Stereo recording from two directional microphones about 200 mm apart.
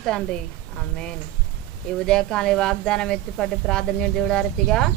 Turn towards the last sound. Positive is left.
turn(degrees=5)  # may be behind; listen again after turning